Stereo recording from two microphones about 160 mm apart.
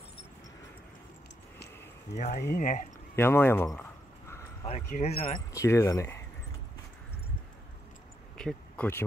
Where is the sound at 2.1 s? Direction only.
50° left (ahead or behind).